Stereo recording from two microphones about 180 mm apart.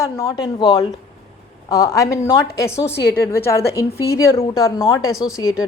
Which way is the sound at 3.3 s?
15° left (ahead or behind).